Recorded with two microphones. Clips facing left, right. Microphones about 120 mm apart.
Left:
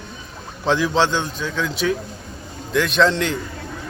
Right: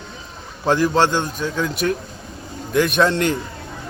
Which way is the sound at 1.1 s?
50° right (ahead or behind).